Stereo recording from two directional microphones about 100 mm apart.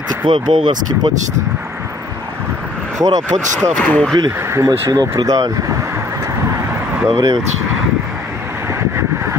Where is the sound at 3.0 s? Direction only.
35° right (ahead or behind).